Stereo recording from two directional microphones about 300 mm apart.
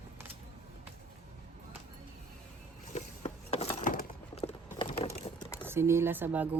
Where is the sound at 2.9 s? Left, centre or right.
Left.